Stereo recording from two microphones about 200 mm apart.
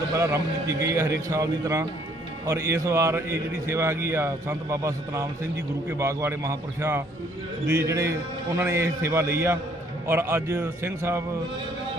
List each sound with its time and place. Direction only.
0.1 s a man's voice: 15° right (ahead or behind)